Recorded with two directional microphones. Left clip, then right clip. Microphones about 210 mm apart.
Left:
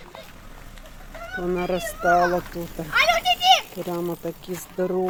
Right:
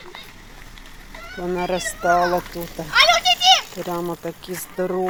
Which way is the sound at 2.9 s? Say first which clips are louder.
Right 4 dB; 50° left (ahead or behind).